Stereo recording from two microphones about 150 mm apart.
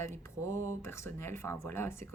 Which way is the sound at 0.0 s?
15° left (ahead or behind).